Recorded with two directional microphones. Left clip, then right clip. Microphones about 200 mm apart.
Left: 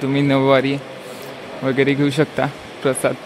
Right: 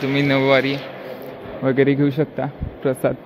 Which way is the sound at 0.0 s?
15° left (ahead or behind).